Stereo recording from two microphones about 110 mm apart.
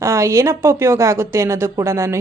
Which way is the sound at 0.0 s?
25° right (ahead or behind).